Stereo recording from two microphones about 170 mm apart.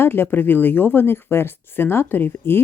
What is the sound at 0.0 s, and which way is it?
Speech, 15° left (ahead or behind).